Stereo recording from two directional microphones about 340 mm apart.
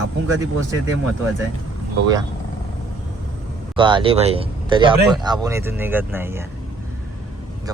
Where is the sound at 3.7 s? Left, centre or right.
Centre.